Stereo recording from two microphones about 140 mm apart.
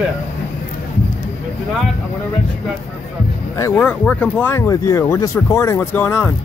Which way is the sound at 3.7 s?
10° left (ahead or behind).